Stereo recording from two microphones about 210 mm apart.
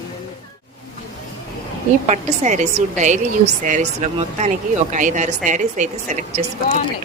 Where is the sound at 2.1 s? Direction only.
35° right (ahead or behind).